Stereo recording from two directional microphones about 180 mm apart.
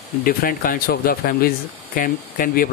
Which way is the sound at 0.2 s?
55° left (ahead or behind).